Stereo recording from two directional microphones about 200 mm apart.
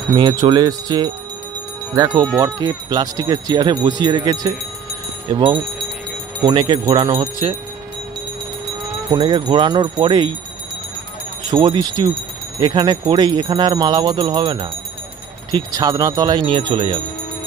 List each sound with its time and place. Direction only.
0.1 s speech: 20° right (ahead or behind)
9.1 s speech: 20° right (ahead or behind)
11.5 s speech: 25° right (ahead or behind)